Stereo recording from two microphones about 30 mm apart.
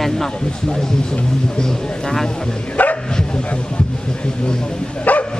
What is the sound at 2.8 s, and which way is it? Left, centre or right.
Dog, left.